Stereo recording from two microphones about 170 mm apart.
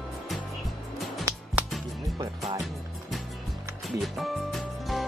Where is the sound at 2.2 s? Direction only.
20° right (ahead or behind).